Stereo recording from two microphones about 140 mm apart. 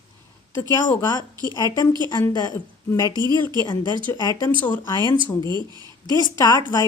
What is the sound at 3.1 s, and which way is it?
Speech, 30° right (ahead or behind).